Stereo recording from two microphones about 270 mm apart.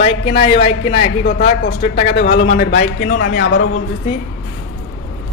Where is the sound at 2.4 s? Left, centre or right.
Left.